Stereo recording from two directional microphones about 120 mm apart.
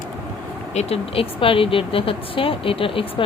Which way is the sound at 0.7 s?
55° left (ahead or behind).